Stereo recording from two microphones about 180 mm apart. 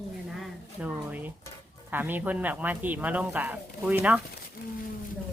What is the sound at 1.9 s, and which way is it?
Speech, 10° right (ahead or behind).